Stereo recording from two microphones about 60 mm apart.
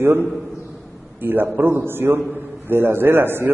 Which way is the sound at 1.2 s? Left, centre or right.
Right.